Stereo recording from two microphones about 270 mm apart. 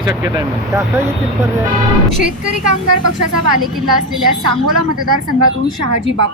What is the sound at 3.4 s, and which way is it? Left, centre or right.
A woman's voice, right.